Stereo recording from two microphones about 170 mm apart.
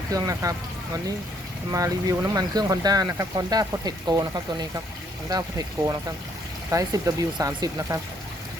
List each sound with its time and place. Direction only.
0.1 s speech: 20° right (ahead or behind)
1.7 s speech: 20° right (ahead or behind)